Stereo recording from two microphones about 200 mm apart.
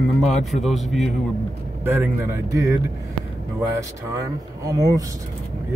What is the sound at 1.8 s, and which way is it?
Speech, 10° right (ahead or behind).